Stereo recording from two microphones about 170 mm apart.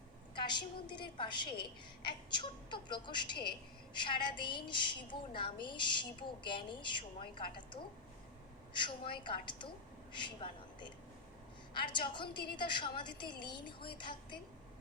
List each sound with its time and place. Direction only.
0.3 s a woman's voice: 25° left (ahead or behind)
9.1 s a woman's voice: 30° left (ahead or behind)